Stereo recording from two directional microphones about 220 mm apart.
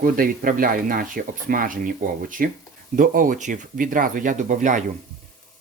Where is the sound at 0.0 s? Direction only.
40° right (ahead or behind).